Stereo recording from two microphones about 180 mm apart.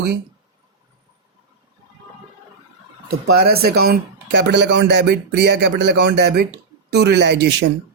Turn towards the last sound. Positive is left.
turn(degrees=-70)  # may be behind; listen again after turning